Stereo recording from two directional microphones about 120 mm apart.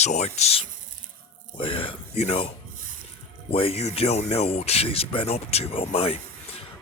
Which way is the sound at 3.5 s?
55° left (ahead or behind).